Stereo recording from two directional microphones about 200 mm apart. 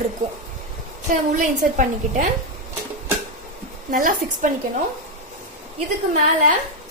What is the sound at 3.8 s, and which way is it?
Speech, 40° right (ahead or behind).